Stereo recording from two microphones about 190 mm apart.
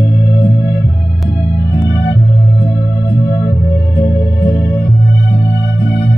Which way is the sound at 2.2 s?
45° left (ahead or behind).